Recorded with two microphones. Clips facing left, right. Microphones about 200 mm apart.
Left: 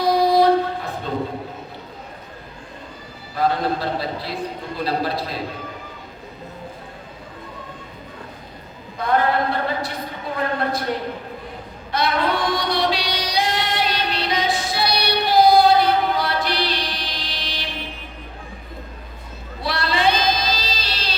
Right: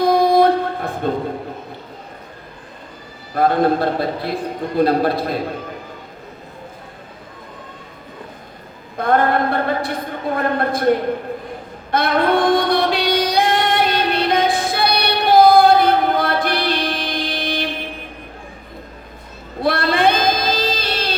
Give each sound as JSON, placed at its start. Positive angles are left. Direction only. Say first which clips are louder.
{"t": 0.0, "sound": "train", "louder": "right 3 dB", "side_deg": -50}
{"t": 3.3, "sound": "a man's voice", "louder": "right 6 dB", "side_deg": -55}
{"t": 9.0, "sound": "a woman's voice", "louder": "right 3 dB", "side_deg": -50}
{"t": 11.9, "sound": "female singing", "louder": "right 5 dB", "side_deg": -55}
{"t": 19.6, "sound": "a sound", "louder": "right 5 dB", "side_deg": -55}